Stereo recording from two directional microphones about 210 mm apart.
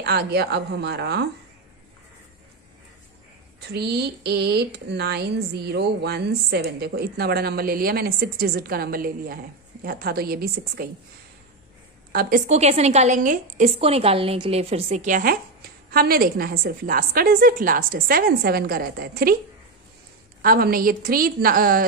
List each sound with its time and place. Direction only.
0.0 s a woman's voice: 50° right (ahead or behind)
3.7 s a woman's voice: 50° right (ahead or behind)
12.1 s a woman's voice: 45° right (ahead or behind)
20.4 s a woman's voice: 45° right (ahead or behind)